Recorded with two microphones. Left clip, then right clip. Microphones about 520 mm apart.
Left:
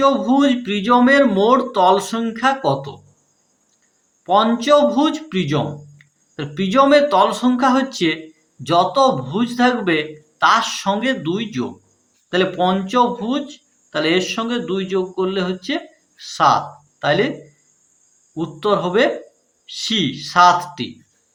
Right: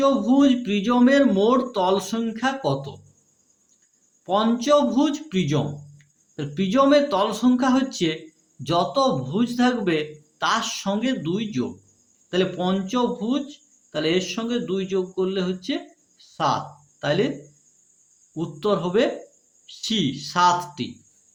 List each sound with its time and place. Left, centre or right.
0.0 s speech: right
4.3 s speech: right
18.3 s speech: right